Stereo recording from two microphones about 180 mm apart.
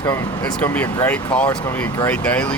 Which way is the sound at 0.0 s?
20° left (ahead or behind).